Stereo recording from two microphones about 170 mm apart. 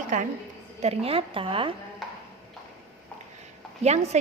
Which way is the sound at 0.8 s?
35° right (ahead or behind).